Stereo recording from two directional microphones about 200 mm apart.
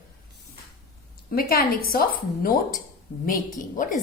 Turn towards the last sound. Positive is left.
turn(degrees=40)  # may be behind; listen again after turning